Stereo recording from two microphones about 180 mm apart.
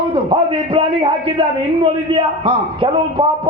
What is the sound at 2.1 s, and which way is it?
Speech, 30° right (ahead or behind).